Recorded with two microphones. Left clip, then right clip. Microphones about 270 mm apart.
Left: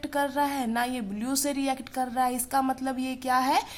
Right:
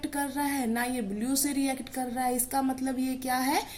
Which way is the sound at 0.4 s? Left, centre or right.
Left.